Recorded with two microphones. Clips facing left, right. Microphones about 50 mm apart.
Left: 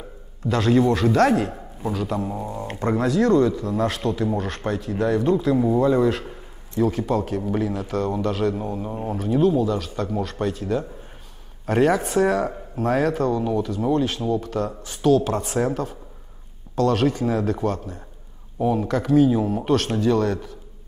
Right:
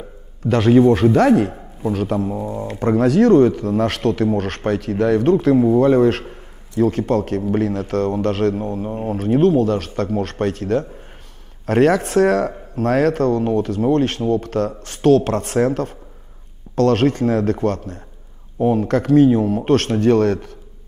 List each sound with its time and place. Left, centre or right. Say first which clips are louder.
0.5 s speech: right 6 dB; right
0.8 s speech: right 5 dB; right
1.9 s speech: right 5 dB; right
2.2 s speech: right 5 dB; centre
2.8 s speech: right 6 dB; right